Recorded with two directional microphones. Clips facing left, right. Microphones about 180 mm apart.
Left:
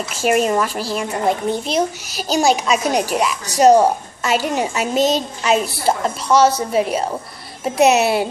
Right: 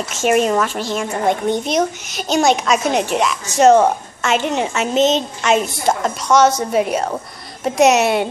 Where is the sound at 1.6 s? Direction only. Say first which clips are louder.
Right 1 dB; 35° left (ahead or behind).